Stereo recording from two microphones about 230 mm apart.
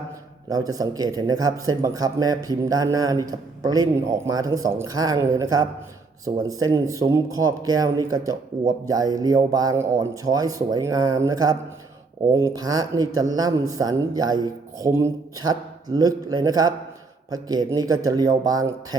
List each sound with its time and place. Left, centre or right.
0.5 s speech: centre